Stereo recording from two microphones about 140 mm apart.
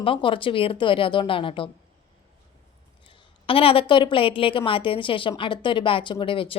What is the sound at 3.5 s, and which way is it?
Speech, 40° left (ahead or behind).